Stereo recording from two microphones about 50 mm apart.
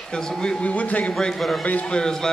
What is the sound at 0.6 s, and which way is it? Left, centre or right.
Speech, left.